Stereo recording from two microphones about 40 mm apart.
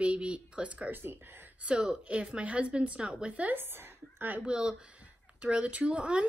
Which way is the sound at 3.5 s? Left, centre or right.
Right.